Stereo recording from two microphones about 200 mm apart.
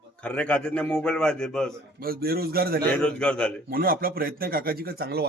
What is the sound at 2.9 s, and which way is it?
Speech, 5° left (ahead or behind).